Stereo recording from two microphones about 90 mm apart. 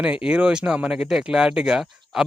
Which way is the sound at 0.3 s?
10° right (ahead or behind).